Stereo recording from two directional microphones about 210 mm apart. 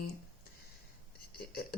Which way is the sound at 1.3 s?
45° left (ahead or behind).